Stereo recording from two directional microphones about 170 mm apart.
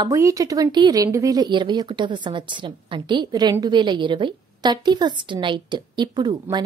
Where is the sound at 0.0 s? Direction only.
20° right (ahead or behind).